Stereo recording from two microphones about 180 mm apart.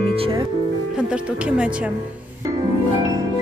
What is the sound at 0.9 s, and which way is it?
Speech, 5° right (ahead or behind).